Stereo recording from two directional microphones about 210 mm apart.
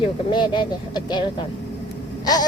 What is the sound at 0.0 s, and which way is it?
Speech, 20° left (ahead or behind).